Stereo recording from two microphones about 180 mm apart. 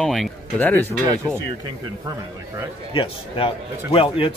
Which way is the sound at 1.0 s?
15° right (ahead or behind).